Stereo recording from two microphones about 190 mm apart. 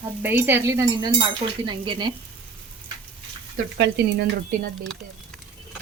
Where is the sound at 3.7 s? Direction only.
65° right (ahead or behind).